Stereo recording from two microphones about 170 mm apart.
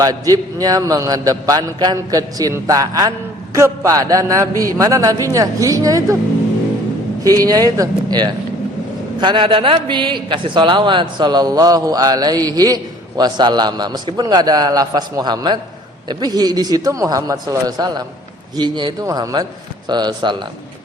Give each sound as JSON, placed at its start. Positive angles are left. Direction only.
{"t": 0.0, "sound": "a man's voice", "side_deg": -20}
{"t": 7.3, "sound": "a man's voice", "side_deg": -20}